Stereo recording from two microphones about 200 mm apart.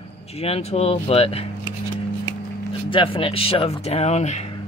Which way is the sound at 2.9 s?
25° left (ahead or behind).